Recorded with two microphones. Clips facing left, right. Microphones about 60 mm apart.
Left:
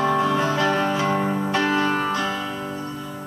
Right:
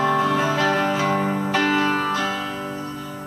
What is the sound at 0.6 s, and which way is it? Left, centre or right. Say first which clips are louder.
Music: right 1 dB; right.